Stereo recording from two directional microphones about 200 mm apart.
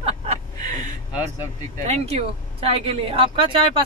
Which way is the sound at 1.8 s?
35° right (ahead or behind).